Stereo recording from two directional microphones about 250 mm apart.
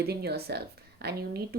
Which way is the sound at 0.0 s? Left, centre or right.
Right.